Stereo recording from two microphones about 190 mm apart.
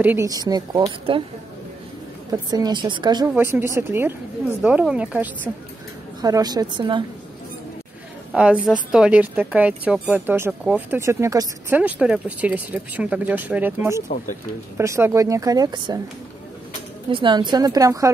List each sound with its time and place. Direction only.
0.0 s speech: 15° right (ahead or behind)
2.3 s speech: 20° right (ahead or behind)
3.3 s speech: 10° right (ahead or behind)
6.2 s speech: 20° right (ahead or behind)
8.3 s a woman's voice: 5° right (ahead or behind)
17.1 s speech: 25° right (ahead or behind)